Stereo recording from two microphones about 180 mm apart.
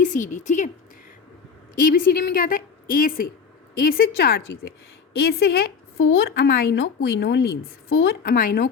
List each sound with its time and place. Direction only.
0.0 s a woman's voice: 45° left (ahead or behind)
1.7 s a woman's voice: 50° left (ahead or behind)